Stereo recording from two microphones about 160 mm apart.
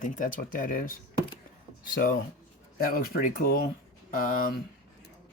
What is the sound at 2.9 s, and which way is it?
Speech, 65° left (ahead or behind).